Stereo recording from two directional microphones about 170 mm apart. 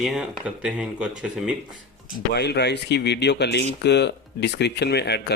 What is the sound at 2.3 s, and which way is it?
Speech, 80° left.